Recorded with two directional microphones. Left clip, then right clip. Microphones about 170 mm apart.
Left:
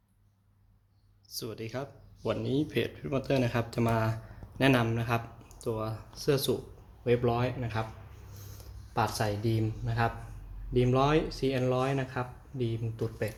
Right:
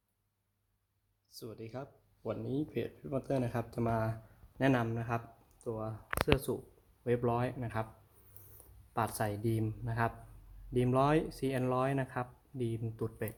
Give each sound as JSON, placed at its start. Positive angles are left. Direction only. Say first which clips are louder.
{"t": 1.3, "sound": "speech", "louder": "left 8 dB", "side_deg": -10}
{"t": 7.0, "sound": "speech", "louder": "left 5 dB", "side_deg": -30}
{"t": 8.9, "sound": "speech", "louder": "left 5 dB", "side_deg": -35}